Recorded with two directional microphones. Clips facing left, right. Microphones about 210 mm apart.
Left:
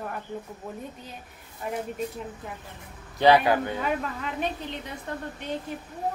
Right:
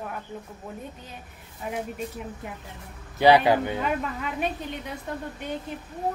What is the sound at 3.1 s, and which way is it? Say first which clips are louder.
Speech: right 1 dB; 15° right (ahead or behind).